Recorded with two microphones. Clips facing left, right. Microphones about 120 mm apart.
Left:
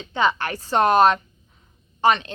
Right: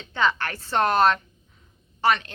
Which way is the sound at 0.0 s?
15° left (ahead or behind).